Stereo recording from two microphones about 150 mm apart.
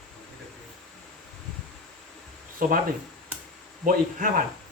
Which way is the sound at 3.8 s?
65° right (ahead or behind).